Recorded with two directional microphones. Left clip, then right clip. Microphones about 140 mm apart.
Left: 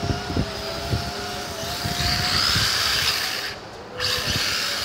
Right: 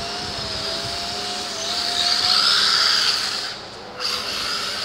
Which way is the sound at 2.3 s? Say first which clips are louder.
Right 4 dB; 45° left (ahead or behind).